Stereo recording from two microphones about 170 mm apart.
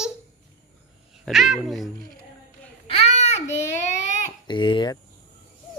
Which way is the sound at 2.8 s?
35° left (ahead or behind).